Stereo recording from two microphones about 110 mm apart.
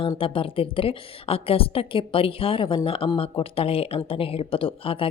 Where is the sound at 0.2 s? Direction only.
55° left (ahead or behind).